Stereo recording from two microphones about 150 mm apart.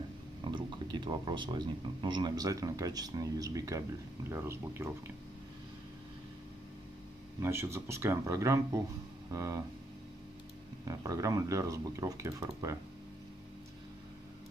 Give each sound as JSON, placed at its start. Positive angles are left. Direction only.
{"t": 0.4, "sound": "speech", "side_deg": -30}
{"t": 7.4, "sound": "speech", "side_deg": -20}
{"t": 10.9, "sound": "speech", "side_deg": -20}